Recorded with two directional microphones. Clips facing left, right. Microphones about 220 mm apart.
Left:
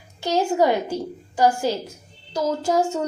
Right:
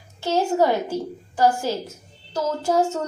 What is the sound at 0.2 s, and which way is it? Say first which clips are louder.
Speech: even; 15° left (ahead or behind).